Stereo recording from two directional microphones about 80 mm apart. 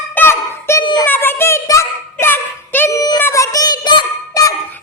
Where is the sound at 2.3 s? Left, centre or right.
Left.